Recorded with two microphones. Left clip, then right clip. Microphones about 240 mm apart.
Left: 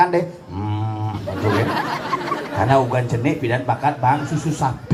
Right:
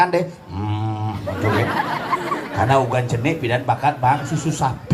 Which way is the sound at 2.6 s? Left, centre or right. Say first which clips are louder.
Even; right.